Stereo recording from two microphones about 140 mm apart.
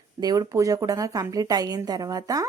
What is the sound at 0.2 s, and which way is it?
Speech, 25° right (ahead or behind).